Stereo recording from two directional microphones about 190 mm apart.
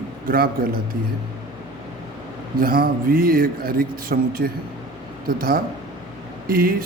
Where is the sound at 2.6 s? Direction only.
50° right (ahead or behind).